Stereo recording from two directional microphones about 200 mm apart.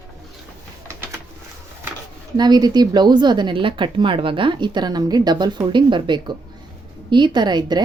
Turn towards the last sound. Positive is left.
turn(degrees=-20)  # may be behind; listen again after turning